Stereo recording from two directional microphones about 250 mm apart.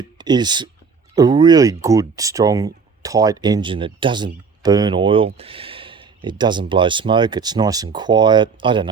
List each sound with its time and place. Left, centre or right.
0.2 s speech: centre